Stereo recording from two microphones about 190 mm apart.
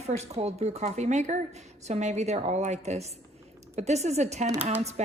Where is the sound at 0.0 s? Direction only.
35° right (ahead or behind).